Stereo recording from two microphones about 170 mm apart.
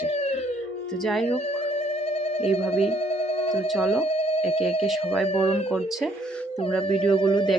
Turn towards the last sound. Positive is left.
turn(degrees=30)  # may be behind; listen again after turning